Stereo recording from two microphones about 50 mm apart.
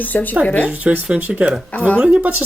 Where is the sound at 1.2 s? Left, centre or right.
Right.